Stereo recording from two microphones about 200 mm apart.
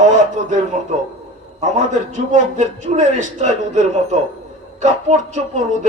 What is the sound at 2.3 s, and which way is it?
A man's voice, 35° right (ahead or behind).